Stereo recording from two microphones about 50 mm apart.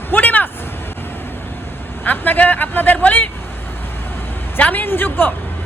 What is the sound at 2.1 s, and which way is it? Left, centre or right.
A man's voice, left.